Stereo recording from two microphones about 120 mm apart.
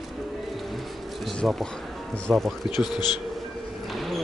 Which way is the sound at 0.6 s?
Centre (ahead or behind).